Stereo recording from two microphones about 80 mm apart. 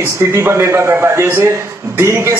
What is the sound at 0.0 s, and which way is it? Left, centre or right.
A man's voice, right.